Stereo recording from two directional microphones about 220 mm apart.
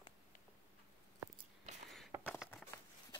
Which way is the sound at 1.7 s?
30° right (ahead or behind).